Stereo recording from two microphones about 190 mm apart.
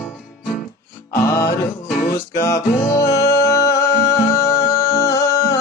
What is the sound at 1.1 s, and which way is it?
Music, 15° left (ahead or behind).